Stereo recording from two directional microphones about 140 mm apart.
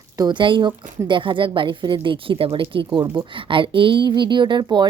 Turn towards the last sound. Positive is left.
turn(degrees=-30)  # may be behind; listen again after turning